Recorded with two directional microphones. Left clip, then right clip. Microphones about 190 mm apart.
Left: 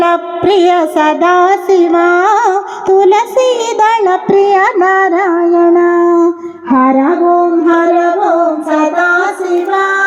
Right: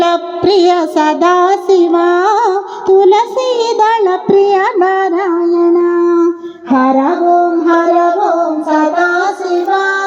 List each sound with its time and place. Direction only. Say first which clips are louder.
0.4 s child singing: left 1 dB; 15° left (ahead or behind)
5.7 s a sound: left 2 dB; 30° left (ahead or behind)
6.7 s music: left 2 dB; 70° left (ahead or behind)
7.0 s music: left 1 dB; 40° left (ahead or behind); by 10.0 s 25° left (ahead or behind)